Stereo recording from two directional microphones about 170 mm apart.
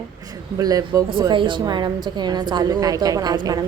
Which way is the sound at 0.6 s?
20° right (ahead or behind).